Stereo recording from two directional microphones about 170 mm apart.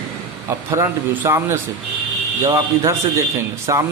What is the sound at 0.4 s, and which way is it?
A man's voice, 15° right (ahead or behind).